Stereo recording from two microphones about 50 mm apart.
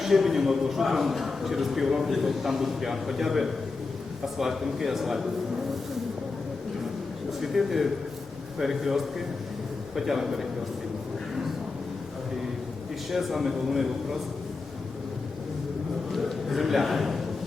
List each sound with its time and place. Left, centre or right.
0.0 s a man's voice: centre
7.4 s a man's voice: centre
13.1 s a man's voice: centre
16.1 s a man's voice: centre